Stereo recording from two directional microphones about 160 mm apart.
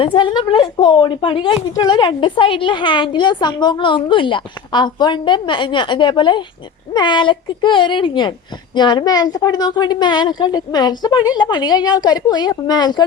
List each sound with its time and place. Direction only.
0.0 s a woman's voice: 30° left (ahead or behind)